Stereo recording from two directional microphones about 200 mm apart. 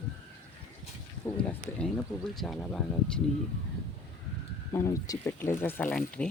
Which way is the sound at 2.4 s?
Centre (ahead or behind).